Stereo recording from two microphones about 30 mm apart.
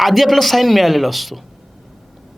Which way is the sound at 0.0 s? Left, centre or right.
Centre.